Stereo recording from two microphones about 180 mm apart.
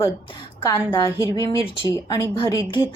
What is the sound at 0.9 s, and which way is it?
Speech, 20° left (ahead or behind).